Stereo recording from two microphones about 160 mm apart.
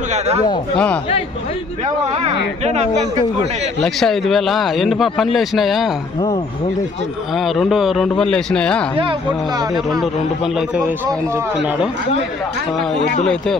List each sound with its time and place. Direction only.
2.2 s speech: 40° right (ahead or behind)
3.8 s speech: centre (ahead or behind)
7.3 s speech: centre (ahead or behind)